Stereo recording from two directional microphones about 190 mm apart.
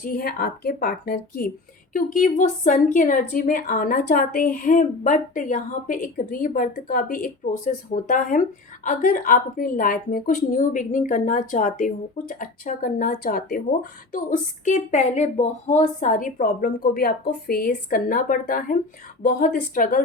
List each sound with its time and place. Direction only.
0.0 s a woman's voice: 50° left (ahead or behind)